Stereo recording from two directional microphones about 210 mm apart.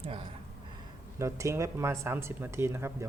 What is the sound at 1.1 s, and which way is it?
Speech, 15° right (ahead or behind).